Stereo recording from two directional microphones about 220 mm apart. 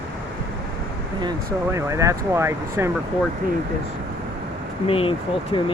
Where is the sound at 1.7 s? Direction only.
15° right (ahead or behind).